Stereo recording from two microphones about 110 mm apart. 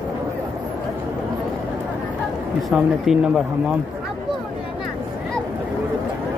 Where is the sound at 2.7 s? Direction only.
5° right (ahead or behind).